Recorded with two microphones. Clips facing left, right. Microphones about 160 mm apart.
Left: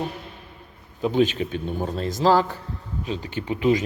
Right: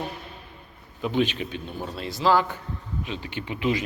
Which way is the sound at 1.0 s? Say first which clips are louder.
Left 4 dB; 40° left (ahead or behind).